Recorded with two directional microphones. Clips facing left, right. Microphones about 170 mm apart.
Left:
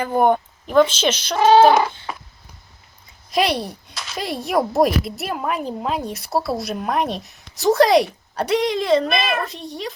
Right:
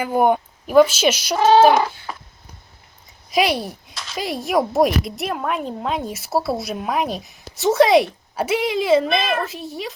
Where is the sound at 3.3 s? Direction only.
Centre (ahead or behind).